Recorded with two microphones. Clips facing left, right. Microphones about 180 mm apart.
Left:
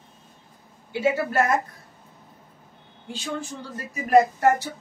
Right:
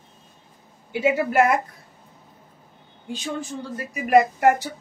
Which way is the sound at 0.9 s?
15° right (ahead or behind).